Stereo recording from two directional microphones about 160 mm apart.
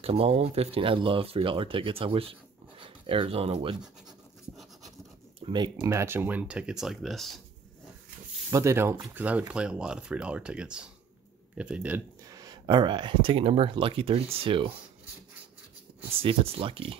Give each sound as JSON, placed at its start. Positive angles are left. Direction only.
{"t": 0.0, "sound": "speech", "side_deg": -40}
{"t": 5.4, "sound": "speech", "side_deg": -25}
{"t": 8.5, "sound": "speech", "side_deg": -20}
{"t": 12.3, "sound": "speech", "side_deg": -25}
{"t": 16.2, "sound": "speech", "side_deg": -35}